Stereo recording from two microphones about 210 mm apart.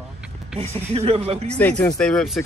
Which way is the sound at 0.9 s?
30° right (ahead or behind).